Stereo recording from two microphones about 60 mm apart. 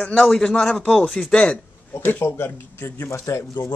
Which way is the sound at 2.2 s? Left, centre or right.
Left.